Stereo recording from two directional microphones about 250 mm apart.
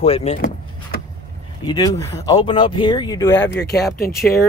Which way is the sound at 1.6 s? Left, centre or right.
Centre.